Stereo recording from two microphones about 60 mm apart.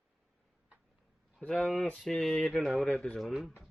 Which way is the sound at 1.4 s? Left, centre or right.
Centre.